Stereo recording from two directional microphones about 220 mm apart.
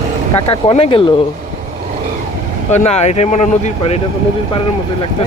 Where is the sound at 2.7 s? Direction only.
30° left (ahead or behind).